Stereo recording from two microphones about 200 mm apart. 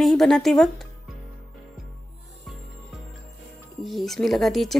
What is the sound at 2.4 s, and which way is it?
Music, centre (ahead or behind).